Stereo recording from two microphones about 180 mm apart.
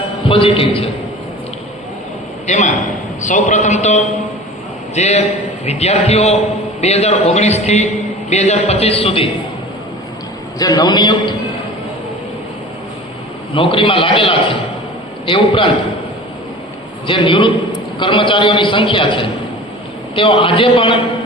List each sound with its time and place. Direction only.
0.3 s a man's voice: 30° left (ahead or behind)
2.5 s a man's voice: 40° left (ahead or behind)
10.6 s a man's voice: 20° left (ahead or behind)
13.5 s a man's voice: 30° left (ahead or behind)
17.1 s a man's voice: 25° left (ahead or behind)